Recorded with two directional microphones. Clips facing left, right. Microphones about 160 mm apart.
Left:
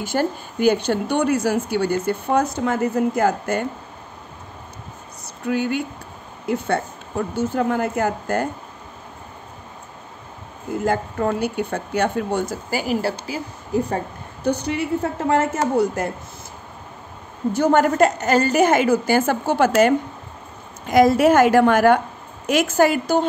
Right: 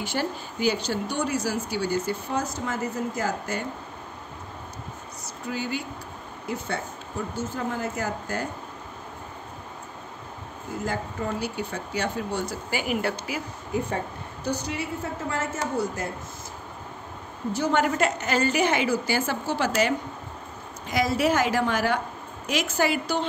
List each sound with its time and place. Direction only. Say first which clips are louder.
0.0 s speech: left 6 dB; 45° left (ahead or behind)
5.5 s speech: left 9 dB; 60° left (ahead or behind)
10.9 s speech: left 9 dB; 60° left (ahead or behind); by 13.9 s 35° left (ahead or behind)
14.4 s speech: left 8 dB; 60° left (ahead or behind)
17.5 s a woman's voice: left 7 dB; 50° left (ahead or behind)
20.9 s a woman's voice: left 9 dB; 55° left (ahead or behind)